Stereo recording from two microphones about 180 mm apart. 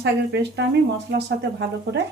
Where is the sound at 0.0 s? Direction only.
75° right (ahead or behind).